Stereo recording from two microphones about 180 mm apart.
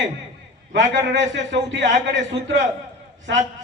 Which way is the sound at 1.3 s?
90° right.